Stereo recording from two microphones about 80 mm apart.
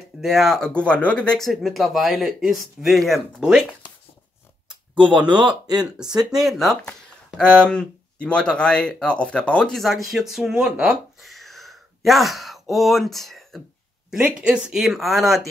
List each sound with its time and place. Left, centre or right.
0.2 s speech: centre
1.5 s speech: centre
5.1 s speech: right
6.3 s speech: centre
14.4 s speech: centre
14.8 s speech: centre